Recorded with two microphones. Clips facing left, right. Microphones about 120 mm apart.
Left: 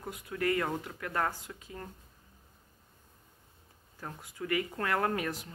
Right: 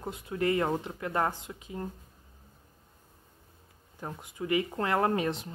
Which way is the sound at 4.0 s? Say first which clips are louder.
Right 3 dB; 20° right (ahead or behind).